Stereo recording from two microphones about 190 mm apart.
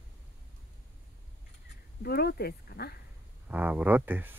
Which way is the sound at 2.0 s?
55° left (ahead or behind).